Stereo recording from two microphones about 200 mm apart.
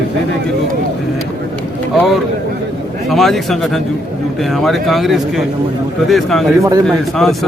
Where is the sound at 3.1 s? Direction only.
Centre (ahead or behind).